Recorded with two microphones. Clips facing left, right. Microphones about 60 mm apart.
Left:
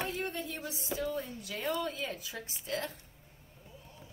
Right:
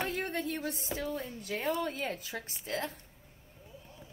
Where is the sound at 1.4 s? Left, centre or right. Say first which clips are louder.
Right 3 dB; right.